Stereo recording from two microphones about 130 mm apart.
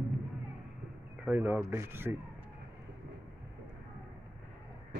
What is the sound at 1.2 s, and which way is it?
Speech, 15° right (ahead or behind).